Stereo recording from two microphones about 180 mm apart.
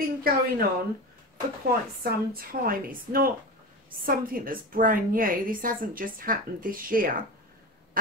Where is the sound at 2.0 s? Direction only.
55° right (ahead or behind).